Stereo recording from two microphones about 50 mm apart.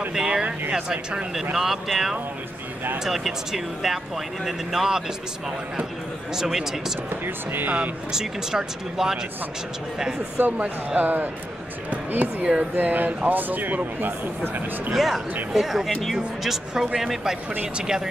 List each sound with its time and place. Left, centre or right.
0.1 s a sound: centre
1.6 s speech: centre
6.3 s speech: centre
7.2 s speech: right
8.1 s speech: centre
10.4 s speech: right
15.0 s speech: centre